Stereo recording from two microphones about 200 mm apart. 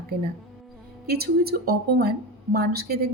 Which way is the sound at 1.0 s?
50° right (ahead or behind).